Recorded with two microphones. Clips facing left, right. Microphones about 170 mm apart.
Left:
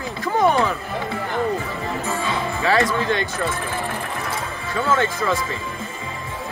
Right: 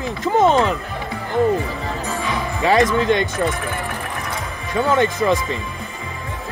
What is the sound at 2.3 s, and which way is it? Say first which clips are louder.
Speech: right 3 dB; 15° right (ahead or behind).